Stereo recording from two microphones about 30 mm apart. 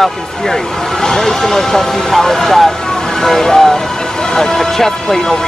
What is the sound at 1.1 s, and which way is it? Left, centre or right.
Speech, left.